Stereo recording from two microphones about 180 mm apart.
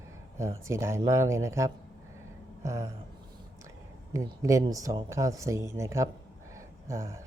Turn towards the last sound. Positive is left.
turn(degrees=-15)  # may be behind; listen again after turning